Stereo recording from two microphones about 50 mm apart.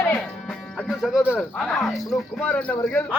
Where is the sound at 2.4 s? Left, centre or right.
Left.